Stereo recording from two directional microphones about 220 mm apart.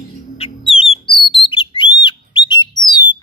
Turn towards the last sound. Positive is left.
turn(degrees=20)  # may be behind; listen again after turning